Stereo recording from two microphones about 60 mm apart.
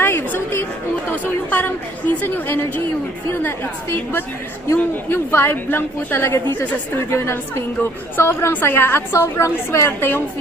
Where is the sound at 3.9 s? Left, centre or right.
Left.